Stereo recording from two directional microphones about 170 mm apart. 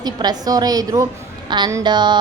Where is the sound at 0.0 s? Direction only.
25° right (ahead or behind).